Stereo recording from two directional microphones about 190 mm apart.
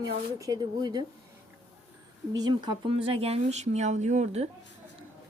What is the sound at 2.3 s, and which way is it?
Speech, 20° right (ahead or behind).